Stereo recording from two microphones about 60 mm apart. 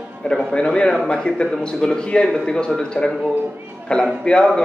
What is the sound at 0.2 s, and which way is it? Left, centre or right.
A man's voice, centre.